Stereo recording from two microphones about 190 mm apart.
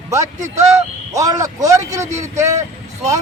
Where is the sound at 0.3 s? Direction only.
40° right (ahead or behind).